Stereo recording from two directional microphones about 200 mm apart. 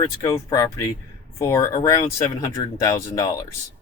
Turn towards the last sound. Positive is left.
turn(degrees=15)  # may be behind; listen again after turning